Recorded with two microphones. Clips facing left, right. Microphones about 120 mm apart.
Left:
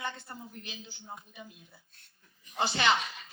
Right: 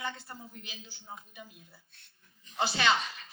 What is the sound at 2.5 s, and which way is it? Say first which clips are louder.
Speech: even; 20° left (ahead or behind).